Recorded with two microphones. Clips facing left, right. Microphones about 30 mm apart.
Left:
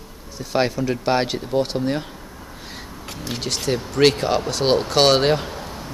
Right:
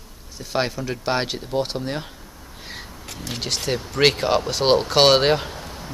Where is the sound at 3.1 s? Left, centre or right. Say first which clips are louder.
Left 2 dB; centre.